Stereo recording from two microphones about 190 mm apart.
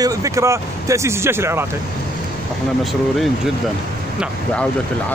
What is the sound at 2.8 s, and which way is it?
Speech, centre (ahead or behind).